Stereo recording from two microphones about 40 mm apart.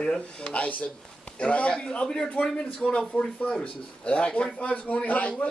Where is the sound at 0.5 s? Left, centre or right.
Left.